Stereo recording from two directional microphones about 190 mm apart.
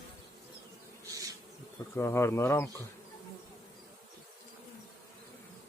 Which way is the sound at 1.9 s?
15° left (ahead or behind).